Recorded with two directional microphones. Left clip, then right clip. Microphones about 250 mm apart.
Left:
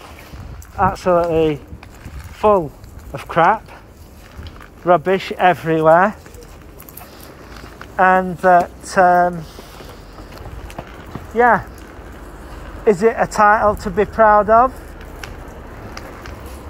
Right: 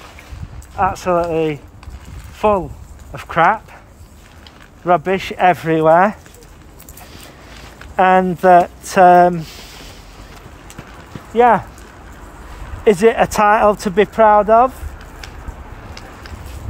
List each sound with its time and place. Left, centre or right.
0.7 s speech: centre
4.8 s speech: right
7.9 s speech: right
11.3 s speech: right
12.8 s speech: right
13.3 s speech: right